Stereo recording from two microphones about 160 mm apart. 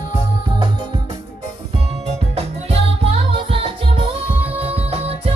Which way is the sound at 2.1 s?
40° right (ahead or behind).